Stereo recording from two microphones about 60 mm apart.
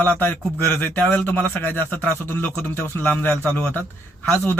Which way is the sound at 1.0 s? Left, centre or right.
Left.